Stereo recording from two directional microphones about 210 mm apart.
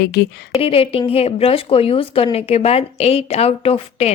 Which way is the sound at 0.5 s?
25° left (ahead or behind).